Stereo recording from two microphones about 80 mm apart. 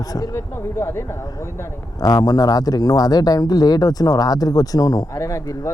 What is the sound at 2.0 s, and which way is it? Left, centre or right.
A man's voice, left.